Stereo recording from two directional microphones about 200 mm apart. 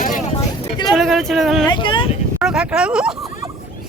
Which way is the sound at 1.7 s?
25° left (ahead or behind).